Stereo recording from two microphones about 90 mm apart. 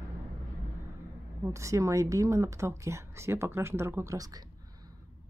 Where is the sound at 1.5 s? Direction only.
35° right (ahead or behind).